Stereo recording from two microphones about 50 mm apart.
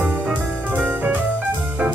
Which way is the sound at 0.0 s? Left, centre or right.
Right.